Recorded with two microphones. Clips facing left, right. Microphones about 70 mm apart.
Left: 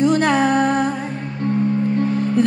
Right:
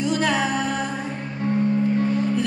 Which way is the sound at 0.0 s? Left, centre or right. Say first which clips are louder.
Left 6 dB; left.